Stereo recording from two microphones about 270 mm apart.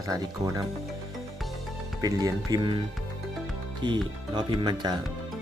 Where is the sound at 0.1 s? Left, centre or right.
Centre.